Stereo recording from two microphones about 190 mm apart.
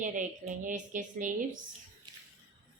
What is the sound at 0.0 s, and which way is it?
A woman's voice, 45° right (ahead or behind).